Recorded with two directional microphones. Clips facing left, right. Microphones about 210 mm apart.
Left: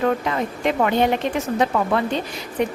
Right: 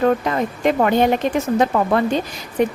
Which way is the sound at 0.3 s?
45° right (ahead or behind).